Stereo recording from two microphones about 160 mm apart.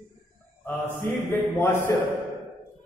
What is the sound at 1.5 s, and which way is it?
Speech, 15° left (ahead or behind).